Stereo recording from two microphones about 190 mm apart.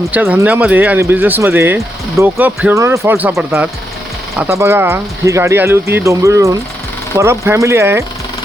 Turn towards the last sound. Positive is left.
turn(degrees=-15)  # may be behind; listen again after turning